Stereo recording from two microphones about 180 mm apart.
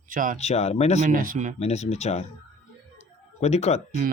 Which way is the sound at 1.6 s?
35° left (ahead or behind).